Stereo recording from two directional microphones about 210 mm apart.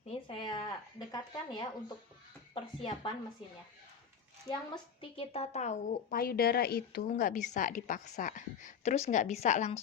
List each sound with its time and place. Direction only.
0.1 s a sound: 25° left (ahead or behind)
2.6 s speech: 25° left (ahead or behind)
4.4 s a woman's voice: 20° left (ahead or behind)